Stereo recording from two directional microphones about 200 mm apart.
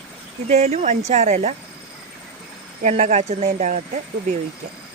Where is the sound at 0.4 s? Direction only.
35° right (ahead or behind).